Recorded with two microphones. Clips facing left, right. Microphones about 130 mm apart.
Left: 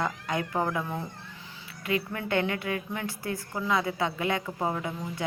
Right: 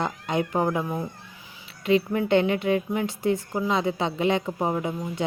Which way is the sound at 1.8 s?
25° right (ahead or behind).